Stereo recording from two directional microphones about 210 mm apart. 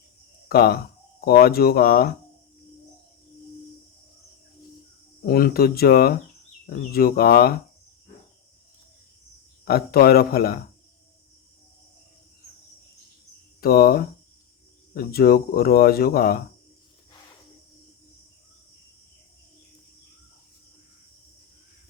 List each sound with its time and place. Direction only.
0.4 s speech: 45° left (ahead or behind)
5.2 s speech: 45° left (ahead or behind)
9.6 s speech: 45° left (ahead or behind)
13.6 s speech: 45° left (ahead or behind)